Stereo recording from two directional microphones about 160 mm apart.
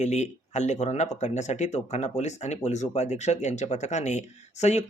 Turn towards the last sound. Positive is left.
turn(degrees=45)  # may be behind; listen again after turning